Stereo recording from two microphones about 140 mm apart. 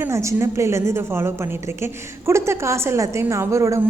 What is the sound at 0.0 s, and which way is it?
A woman's voice, 20° right (ahead or behind).